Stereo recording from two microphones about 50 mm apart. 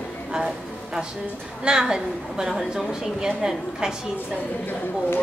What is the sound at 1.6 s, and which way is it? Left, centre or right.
A woman's voice, centre.